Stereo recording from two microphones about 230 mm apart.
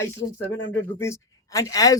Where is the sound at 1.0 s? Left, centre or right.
Centre.